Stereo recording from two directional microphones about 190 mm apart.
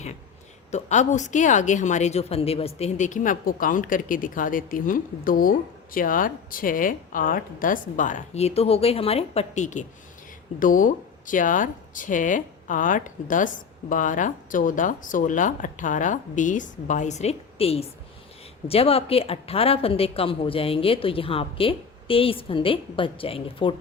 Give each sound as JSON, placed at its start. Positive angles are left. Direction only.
{"t": 0.7, "sound": "a woman's voice", "side_deg": 40}